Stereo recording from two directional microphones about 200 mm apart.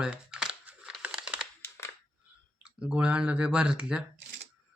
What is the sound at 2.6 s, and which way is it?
Speech, 5° right (ahead or behind).